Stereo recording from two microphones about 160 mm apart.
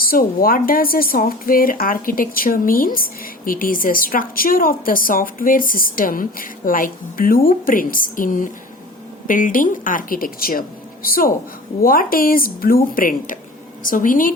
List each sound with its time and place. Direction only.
0.0 s speech: 65° left (ahead or behind)